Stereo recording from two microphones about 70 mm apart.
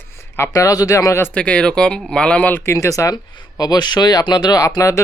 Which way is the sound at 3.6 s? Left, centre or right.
Left.